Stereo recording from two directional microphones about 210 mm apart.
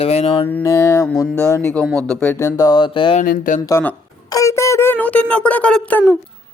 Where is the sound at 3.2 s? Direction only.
40° left (ahead or behind).